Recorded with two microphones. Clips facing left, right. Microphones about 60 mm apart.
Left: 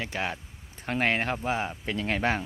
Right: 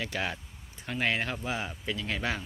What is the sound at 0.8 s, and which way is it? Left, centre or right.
Speech, left.